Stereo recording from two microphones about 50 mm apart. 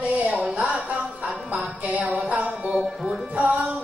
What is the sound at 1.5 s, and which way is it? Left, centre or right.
Music, right.